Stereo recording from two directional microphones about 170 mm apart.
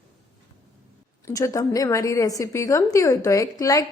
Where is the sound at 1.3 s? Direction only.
20° left (ahead or behind).